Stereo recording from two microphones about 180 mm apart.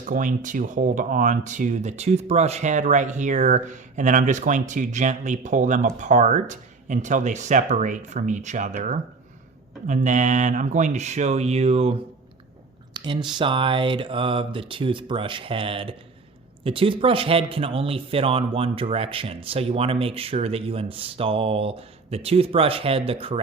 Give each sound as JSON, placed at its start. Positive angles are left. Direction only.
{"t": 0.0, "sound": "speech", "side_deg": -45}
{"t": 12.9, "sound": "a sound", "side_deg": -25}
{"t": 13.4, "sound": "speech", "side_deg": -25}